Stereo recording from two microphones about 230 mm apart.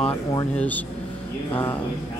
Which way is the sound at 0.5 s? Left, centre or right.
Centre.